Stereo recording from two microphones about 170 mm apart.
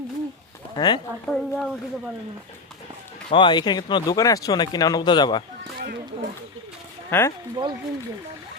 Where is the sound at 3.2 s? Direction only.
30° left (ahead or behind).